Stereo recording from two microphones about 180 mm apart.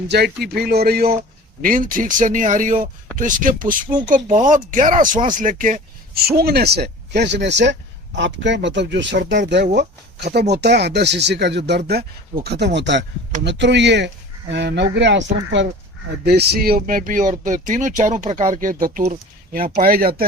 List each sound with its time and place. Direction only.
0.4 s speech: 60° right (ahead or behind)
16.2 s speech: 65° right (ahead or behind)